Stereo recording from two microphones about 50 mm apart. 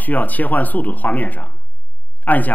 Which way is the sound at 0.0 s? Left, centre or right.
Left.